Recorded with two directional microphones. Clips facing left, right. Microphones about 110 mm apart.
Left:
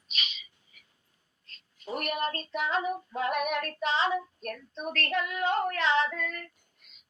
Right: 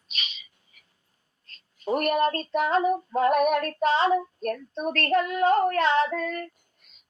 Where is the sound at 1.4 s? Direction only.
45° right (ahead or behind).